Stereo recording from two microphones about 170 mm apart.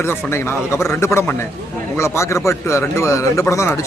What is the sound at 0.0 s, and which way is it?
Speech, 15° left (ahead or behind).